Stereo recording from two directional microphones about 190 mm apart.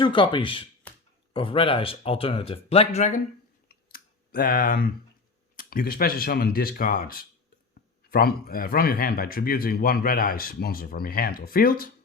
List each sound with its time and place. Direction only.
0.0 s speech: 25° left (ahead or behind)
3.7 s clicking: 55° left (ahead or behind)
5.5 s a man's voice: 50° left (ahead or behind)